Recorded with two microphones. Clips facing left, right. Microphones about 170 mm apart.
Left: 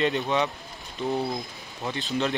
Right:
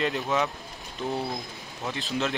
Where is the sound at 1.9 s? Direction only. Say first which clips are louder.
Left 2 dB; centre (ahead or behind).